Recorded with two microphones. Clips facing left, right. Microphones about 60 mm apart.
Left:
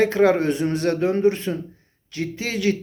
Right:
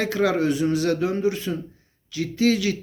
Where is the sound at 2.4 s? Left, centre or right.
Left.